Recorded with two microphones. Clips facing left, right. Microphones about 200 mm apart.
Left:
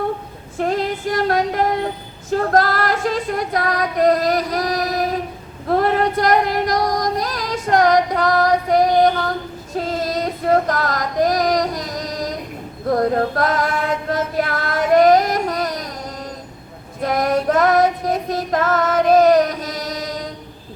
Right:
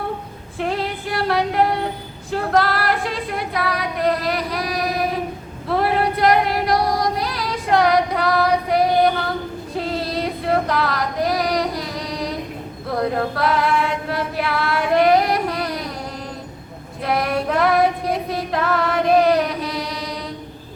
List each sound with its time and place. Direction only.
0.6 s female singing: 45° left (ahead or behind)
12.9 s a sound: 45° left (ahead or behind)
17.0 s female singing: 45° left (ahead or behind)